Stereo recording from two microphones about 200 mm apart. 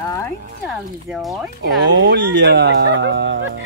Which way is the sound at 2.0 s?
60° right (ahead or behind).